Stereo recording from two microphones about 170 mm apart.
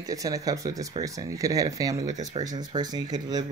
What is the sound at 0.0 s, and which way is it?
Speech, 20° right (ahead or behind).